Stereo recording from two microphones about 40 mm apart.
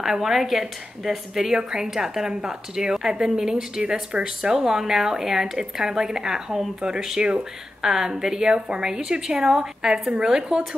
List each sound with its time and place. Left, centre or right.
0.0 s a woman's voice: centre; by 4.3 s right
4.4 s a woman's voice: centre
7.8 s a woman's voice: centre